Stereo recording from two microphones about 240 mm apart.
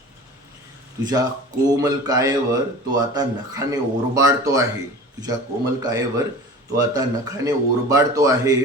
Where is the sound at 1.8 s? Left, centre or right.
Centre.